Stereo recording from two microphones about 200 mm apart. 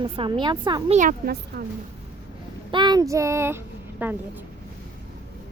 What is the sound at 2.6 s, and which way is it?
Speech, 20° right (ahead or behind).